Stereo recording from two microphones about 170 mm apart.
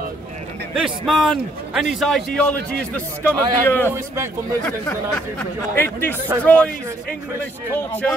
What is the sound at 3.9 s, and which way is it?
Speech, 15° right (ahead or behind).